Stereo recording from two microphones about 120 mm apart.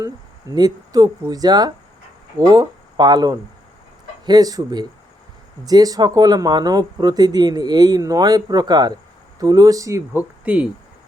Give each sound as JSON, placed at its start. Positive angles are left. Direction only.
{"t": 0.5, "sound": "speech", "side_deg": -30}
{"t": 10.1, "sound": "speech", "side_deg": -10}